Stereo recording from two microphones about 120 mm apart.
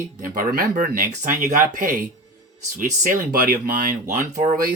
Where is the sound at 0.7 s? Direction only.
90° right.